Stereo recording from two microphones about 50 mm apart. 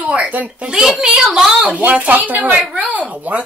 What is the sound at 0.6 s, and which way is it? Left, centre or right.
Speech, centre.